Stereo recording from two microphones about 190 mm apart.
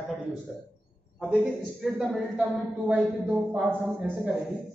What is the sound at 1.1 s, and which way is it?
A man's voice, 5° right (ahead or behind).